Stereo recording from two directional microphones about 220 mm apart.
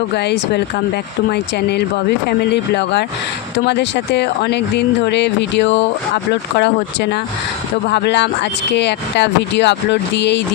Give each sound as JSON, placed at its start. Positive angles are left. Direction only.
{"t": 0.1, "sound": "speech", "side_deg": 50}